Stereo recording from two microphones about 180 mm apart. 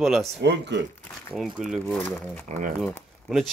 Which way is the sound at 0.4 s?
70° right (ahead or behind).